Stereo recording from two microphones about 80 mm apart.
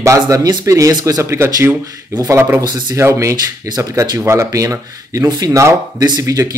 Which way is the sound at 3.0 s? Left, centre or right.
Right.